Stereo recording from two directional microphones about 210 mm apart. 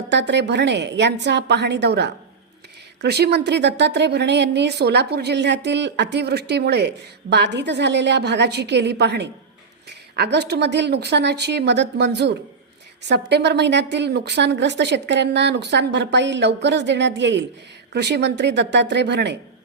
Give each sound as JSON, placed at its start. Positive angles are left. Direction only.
{"t": 0.1, "sound": "a woman's voice", "side_deg": -55}